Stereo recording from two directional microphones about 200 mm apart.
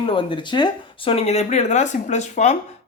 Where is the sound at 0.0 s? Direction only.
25° left (ahead or behind).